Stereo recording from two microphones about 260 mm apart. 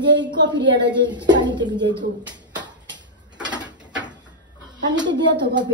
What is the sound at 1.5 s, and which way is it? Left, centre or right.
Speech, centre.